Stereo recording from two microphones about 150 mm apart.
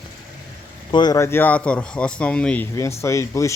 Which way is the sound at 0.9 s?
25° left (ahead or behind).